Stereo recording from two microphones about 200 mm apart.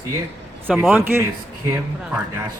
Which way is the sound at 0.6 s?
10° right (ahead or behind).